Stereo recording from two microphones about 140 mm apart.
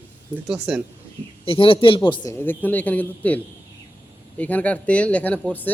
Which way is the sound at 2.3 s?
15° left (ahead or behind).